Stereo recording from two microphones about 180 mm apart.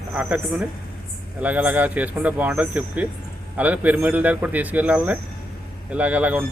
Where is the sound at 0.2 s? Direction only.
10° right (ahead or behind).